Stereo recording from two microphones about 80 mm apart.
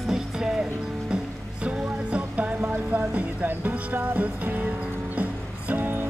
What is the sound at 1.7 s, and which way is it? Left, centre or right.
Music, centre.